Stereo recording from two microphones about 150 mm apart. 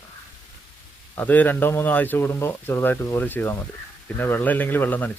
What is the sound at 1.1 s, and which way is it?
Speech, 10° left (ahead or behind).